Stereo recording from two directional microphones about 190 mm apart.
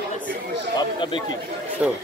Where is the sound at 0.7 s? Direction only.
25° left (ahead or behind).